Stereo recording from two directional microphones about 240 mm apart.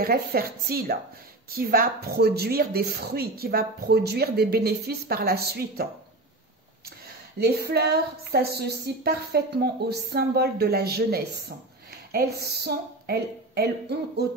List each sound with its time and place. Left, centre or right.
0.0 s speech: right
7.3 s speech: right